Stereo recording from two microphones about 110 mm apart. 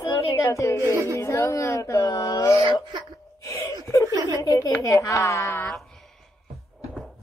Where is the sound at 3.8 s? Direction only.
30° left (ahead or behind).